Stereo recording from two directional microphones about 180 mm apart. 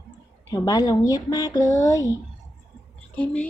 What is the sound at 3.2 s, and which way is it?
Speech, 5° left (ahead or behind).